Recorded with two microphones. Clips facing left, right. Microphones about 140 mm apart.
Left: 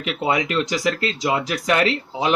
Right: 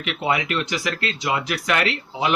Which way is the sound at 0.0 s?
30° left (ahead or behind).